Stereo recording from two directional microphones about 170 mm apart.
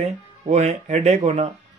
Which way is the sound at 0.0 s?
40° right (ahead or behind).